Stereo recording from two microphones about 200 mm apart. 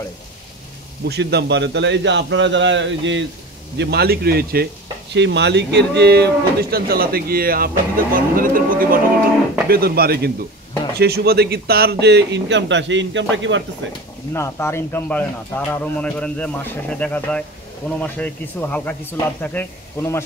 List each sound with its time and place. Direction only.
1.0 s a man's voice: 55° right (ahead or behind)
5.1 s a man's voice: 60° right (ahead or behind)
14.3 s speech: 15° left (ahead or behind)